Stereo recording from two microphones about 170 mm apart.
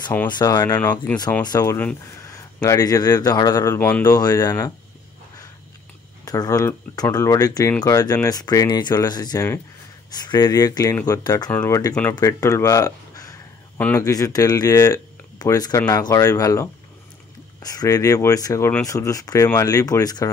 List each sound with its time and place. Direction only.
0.3 s speech: 25° left (ahead or behind)
0.7 s speech: 10° left (ahead or behind)
6.2 s speech: 20° left (ahead or behind)